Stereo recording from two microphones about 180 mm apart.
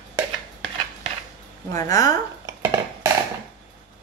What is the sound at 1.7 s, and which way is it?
Speech, 20° left (ahead or behind).